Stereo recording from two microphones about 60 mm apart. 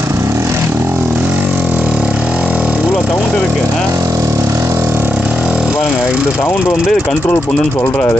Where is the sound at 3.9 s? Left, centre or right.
Right.